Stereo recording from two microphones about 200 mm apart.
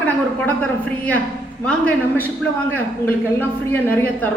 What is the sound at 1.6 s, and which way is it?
A man's voice, 5° left (ahead or behind).